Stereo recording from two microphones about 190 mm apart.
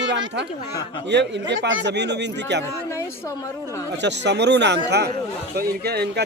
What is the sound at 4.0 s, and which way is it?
A man's voice, 65° right (ahead or behind).